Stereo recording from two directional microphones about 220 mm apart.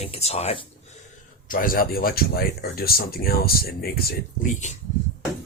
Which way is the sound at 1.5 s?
40° left (ahead or behind).